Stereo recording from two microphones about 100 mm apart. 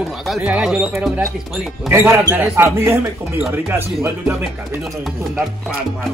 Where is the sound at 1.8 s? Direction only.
25° right (ahead or behind).